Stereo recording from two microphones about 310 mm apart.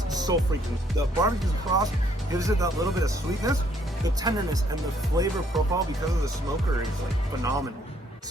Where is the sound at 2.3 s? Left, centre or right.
Centre.